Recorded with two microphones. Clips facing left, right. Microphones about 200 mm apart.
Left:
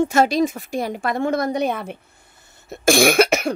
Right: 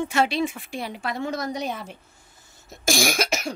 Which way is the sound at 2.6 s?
60° left (ahead or behind).